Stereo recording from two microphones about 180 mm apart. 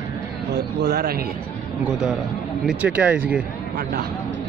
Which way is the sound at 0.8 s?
65° right (ahead or behind).